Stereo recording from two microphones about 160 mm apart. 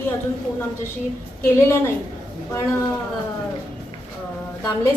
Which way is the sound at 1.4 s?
15° left (ahead or behind).